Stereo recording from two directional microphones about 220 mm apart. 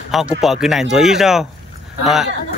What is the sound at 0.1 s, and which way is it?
Speech, centre (ahead or behind).